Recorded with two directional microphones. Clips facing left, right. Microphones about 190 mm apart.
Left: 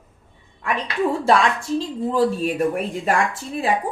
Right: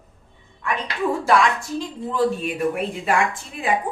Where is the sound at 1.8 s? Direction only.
35° left (ahead or behind).